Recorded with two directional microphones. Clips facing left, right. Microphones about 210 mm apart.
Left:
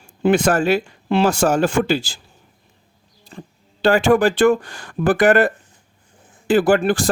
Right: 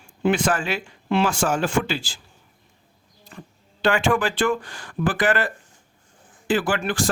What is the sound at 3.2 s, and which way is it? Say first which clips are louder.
Speech: left 4 dB; 30° left (ahead or behind).